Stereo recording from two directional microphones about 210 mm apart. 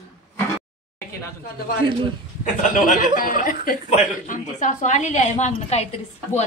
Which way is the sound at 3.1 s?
40° left (ahead or behind).